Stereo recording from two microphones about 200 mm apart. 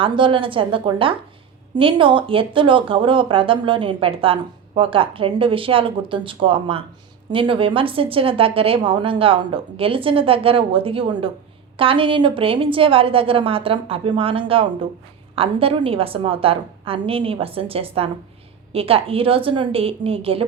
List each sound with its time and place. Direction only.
0.0 s speech: 25° right (ahead or behind)